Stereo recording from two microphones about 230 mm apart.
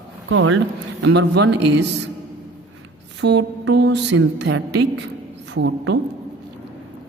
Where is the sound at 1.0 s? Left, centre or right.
Right.